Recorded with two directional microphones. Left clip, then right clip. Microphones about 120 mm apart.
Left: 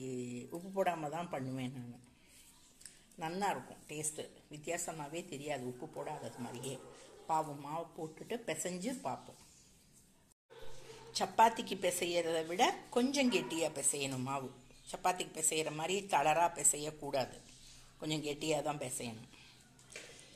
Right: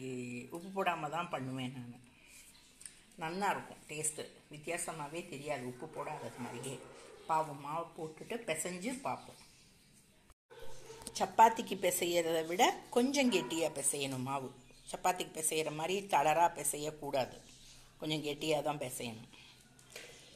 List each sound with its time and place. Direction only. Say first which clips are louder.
0.0 s a sound: even; 20° left (ahead or behind)
0.7 s speech: even; 5° left (ahead or behind)
3.2 s speech: right 1 dB; centre (ahead or behind)
11.1 s a woman's voice: right 2 dB; 15° right (ahead or behind)